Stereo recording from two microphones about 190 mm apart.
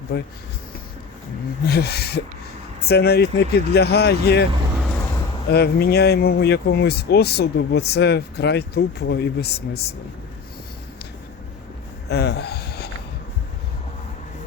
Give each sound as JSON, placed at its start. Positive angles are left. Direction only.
{"t": 0.1, "sound": "speech", "side_deg": 60}
{"t": 1.6, "sound": "speech", "side_deg": 55}
{"t": 5.5, "sound": "speech", "side_deg": 55}
{"t": 12.0, "sound": "a sound", "side_deg": 60}